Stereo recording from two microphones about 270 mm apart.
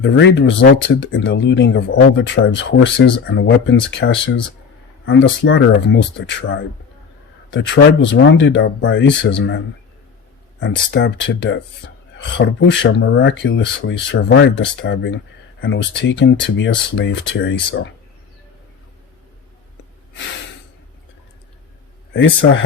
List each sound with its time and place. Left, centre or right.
0.0 s speech: left
10.6 s speech: left
22.1 s speech: left